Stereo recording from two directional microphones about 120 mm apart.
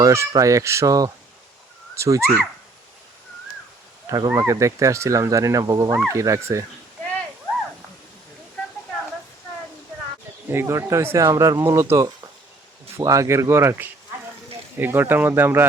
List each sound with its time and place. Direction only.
0.0 s speech: 25° right (ahead or behind)
4.0 s speech: 30° right (ahead or behind)
10.5 s speech: 20° right (ahead or behind)